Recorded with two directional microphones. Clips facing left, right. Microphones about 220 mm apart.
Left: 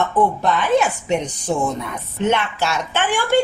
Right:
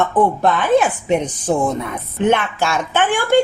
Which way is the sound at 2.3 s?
50° right (ahead or behind).